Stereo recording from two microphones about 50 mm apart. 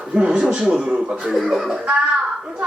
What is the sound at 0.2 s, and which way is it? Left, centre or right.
A man's voice, centre.